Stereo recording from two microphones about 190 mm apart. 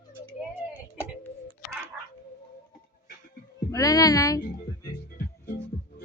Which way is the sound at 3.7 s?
20° left (ahead or behind).